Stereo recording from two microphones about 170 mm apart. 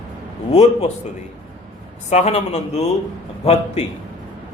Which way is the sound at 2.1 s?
40° left (ahead or behind).